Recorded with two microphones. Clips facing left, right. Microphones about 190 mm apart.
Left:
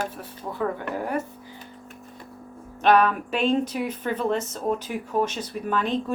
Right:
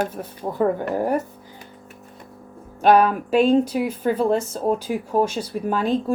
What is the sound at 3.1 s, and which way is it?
Speech, 35° right (ahead or behind).